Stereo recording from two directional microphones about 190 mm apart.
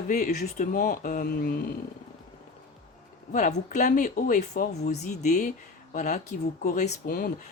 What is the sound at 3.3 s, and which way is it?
Speech, 40° left (ahead or behind).